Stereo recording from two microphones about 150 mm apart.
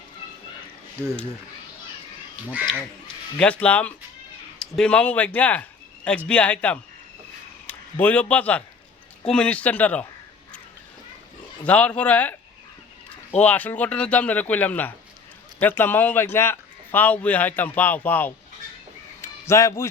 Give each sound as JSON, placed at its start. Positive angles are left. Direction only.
{"t": 3.3, "sound": "a man's voice", "side_deg": 10}
{"t": 11.6, "sound": "a man's voice", "side_deg": 10}
{"t": 19.2, "sound": "a sound", "side_deg": 20}